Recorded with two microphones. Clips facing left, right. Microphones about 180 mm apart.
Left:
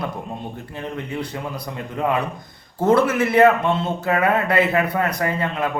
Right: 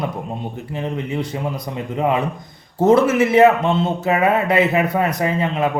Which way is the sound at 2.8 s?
20° right (ahead or behind).